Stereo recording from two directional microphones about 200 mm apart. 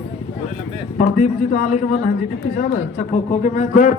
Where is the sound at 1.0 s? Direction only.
35° left (ahead or behind).